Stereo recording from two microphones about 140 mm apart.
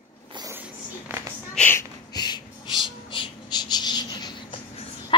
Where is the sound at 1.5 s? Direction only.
15° left (ahead or behind).